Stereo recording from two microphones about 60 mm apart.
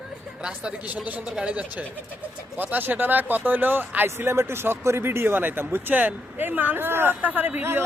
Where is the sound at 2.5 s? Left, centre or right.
Right.